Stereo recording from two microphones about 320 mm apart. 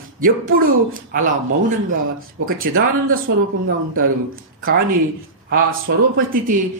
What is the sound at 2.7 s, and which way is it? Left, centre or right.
Speech, right.